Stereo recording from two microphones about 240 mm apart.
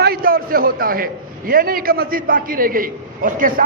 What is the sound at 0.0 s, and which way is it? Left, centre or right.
A man's voice, right.